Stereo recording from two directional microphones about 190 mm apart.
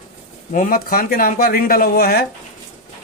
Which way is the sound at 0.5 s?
45° left (ahead or behind).